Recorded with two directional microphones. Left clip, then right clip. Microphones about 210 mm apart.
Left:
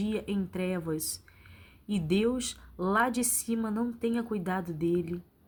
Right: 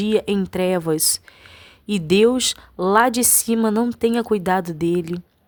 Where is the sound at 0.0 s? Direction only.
50° right (ahead or behind).